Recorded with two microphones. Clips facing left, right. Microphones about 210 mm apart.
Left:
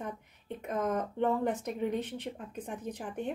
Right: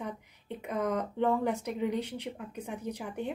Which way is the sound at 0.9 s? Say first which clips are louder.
Right 1 dB; 65° right (ahead or behind).